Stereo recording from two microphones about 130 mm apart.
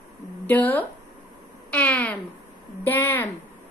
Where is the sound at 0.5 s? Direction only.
15° left (ahead or behind).